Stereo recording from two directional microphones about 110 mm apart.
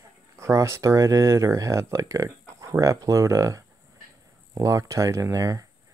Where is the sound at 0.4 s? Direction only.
25° right (ahead or behind).